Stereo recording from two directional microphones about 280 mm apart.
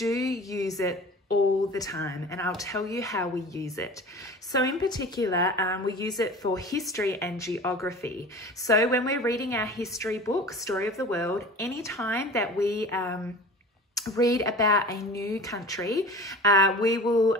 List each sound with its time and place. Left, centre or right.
0.0 s a woman's voice: centre